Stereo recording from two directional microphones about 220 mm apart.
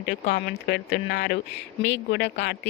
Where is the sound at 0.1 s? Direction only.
50° left (ahead or behind).